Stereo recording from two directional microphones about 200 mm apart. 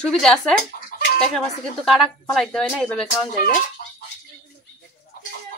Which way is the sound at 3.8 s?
40° left (ahead or behind).